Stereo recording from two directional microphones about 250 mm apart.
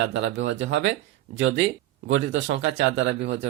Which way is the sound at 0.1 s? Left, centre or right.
Right.